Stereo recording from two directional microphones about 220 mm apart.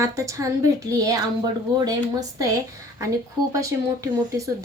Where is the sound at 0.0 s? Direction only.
15° right (ahead or behind).